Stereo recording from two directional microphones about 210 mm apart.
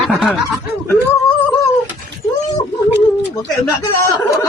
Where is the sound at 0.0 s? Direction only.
Centre (ahead or behind).